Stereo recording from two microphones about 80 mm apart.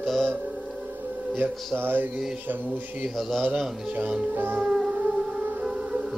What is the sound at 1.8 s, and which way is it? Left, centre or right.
Speech, right.